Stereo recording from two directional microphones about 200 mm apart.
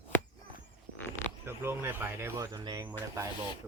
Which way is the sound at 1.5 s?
10° right (ahead or behind).